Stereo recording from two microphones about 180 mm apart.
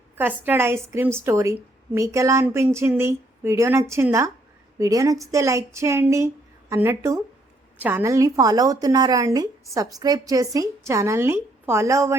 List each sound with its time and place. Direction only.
0.2 s a woman's voice: 10° right (ahead or behind)